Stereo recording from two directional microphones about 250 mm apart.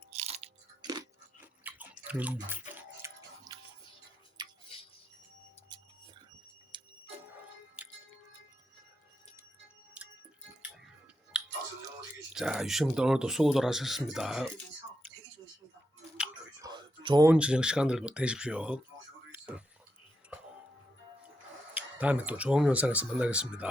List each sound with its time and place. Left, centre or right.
0.1 s crunch: right; by 3.1 s centre
3.5 s music: centre
4.4 s a sound: centre
6.7 s music: centre
7.8 s music: centre
10.0 s music: centre
11.3 s a sound: centre
12.3 s speech: centre
16.6 s a sound: centre
17.3 s speech: centre
19.3 s a sound: centre
21.8 s speech: centre